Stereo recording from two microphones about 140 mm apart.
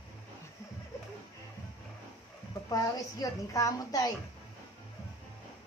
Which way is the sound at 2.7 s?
25° left (ahead or behind).